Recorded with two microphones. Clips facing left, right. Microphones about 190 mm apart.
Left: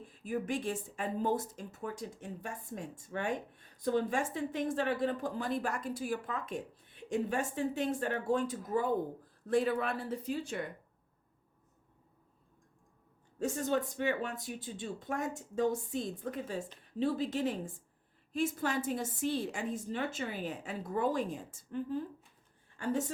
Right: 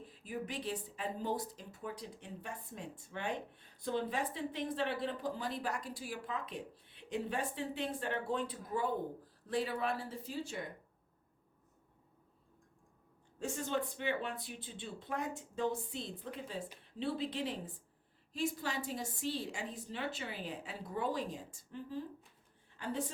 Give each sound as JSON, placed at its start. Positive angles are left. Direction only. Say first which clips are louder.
{"t": 0.0, "sound": "speech", "louder": "left 6 dB", "side_deg": 45}
{"t": 13.4, "sound": "speech", "louder": "left 5 dB", "side_deg": 45}